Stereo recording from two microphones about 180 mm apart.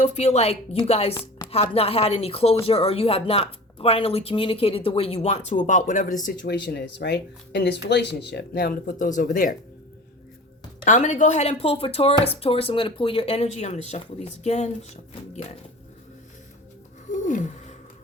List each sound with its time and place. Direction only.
0.0 s speech: 35° left (ahead or behind)
6.4 s speech: 60° left (ahead or behind)
10.8 s speech: 45° left (ahead or behind)
17.1 s a sound: 45° left (ahead or behind)